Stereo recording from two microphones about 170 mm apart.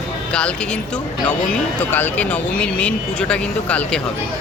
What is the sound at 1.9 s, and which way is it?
Speech, 10° left (ahead or behind).